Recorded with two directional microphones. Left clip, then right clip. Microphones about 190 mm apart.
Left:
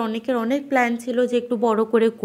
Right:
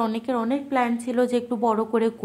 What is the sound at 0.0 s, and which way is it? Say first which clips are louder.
A woman's voice: left 2 dB; 5° left (ahead or behind).